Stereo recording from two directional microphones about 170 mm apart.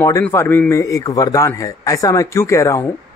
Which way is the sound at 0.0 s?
15° left (ahead or behind).